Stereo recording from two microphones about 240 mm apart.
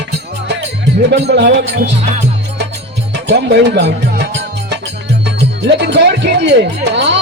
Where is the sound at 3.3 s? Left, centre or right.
Right.